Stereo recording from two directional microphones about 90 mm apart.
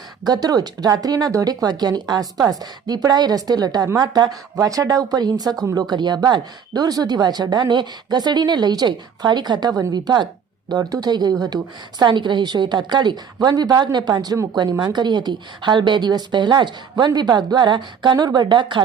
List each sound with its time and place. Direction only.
0.3 s a woman's voice: 45° right (ahead or behind)